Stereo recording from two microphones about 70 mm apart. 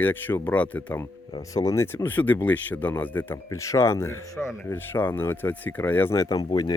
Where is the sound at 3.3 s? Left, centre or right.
Left.